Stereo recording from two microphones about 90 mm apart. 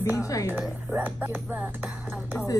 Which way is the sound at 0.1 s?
40° left (ahead or behind).